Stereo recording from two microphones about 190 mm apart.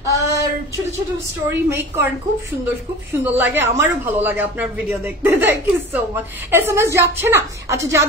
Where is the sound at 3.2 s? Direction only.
10° right (ahead or behind).